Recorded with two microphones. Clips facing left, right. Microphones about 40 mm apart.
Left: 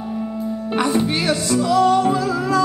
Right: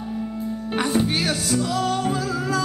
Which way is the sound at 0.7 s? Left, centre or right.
Centre.